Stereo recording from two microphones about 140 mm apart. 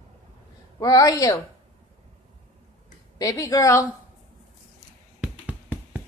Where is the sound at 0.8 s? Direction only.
25° left (ahead or behind).